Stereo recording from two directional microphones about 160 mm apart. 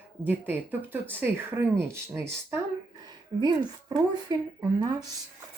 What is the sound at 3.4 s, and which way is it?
Speech, 25° right (ahead or behind).